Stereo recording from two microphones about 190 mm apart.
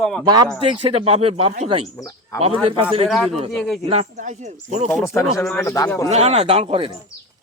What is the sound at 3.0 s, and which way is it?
Speech, centre (ahead or behind).